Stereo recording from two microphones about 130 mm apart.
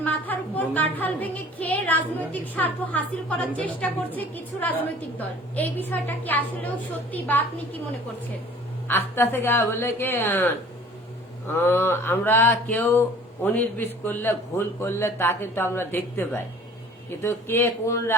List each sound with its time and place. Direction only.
0.0 s speech: 15° left (ahead or behind)
8.9 s speech: 15° left (ahead or behind)